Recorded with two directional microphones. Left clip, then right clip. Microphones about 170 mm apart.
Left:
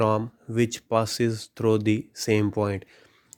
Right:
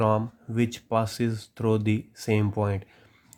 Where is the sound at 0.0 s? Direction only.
35° left (ahead or behind).